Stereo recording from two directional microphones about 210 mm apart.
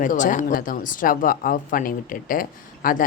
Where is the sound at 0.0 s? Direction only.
40° left (ahead or behind).